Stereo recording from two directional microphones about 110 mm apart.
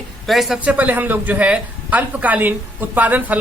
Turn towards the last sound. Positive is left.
turn(degrees=-15)  # may be behind; listen again after turning